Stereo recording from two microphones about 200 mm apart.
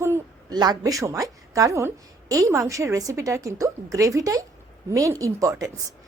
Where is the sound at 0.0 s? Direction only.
15° right (ahead or behind).